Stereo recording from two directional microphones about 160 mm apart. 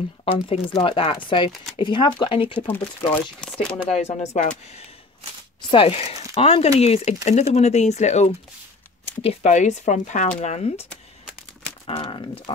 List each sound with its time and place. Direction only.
0.2 s speech: 40° left (ahead or behind)
11.8 s speech: 35° left (ahead or behind)